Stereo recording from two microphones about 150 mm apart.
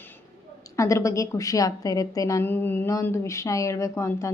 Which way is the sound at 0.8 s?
20° left (ahead or behind).